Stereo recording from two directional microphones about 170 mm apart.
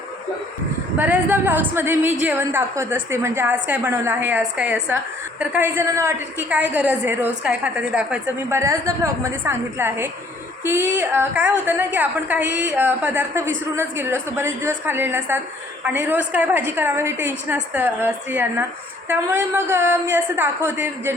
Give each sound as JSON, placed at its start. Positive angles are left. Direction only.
{"t": 0.9, "sound": "a woman's voice", "side_deg": -10}
{"t": 8.5, "sound": "a woman's voice", "side_deg": -15}